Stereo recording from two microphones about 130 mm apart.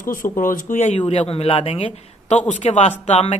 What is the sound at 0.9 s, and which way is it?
Speech, 45° left (ahead or behind).